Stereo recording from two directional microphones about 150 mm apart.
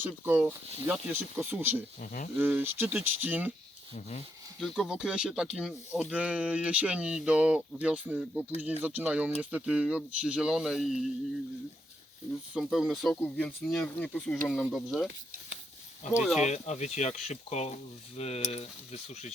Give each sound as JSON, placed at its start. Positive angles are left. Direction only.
{"t": 0.0, "sound": "speech", "side_deg": -10}
{"t": 2.0, "sound": "speech", "side_deg": 60}
{"t": 2.4, "sound": "speech", "side_deg": -15}
{"t": 4.6, "sound": "speech", "side_deg": 0}
{"t": 12.5, "sound": "speech", "side_deg": -5}
{"t": 16.1, "sound": "speech", "side_deg": -5}
{"t": 16.4, "sound": "speech", "side_deg": 50}